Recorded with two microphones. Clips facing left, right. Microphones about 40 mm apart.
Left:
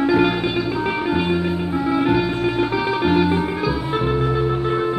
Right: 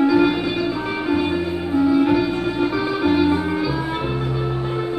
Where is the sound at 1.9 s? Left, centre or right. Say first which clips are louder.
Left 1 dB; centre.